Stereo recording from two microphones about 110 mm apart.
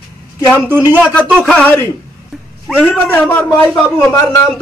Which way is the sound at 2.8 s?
15° left (ahead or behind).